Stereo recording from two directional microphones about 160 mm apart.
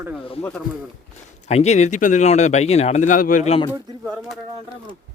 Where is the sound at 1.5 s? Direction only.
45° left (ahead or behind).